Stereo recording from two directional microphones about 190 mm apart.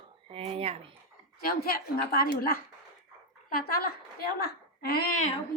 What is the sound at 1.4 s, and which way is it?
A woman's voice, 50° left (ahead or behind).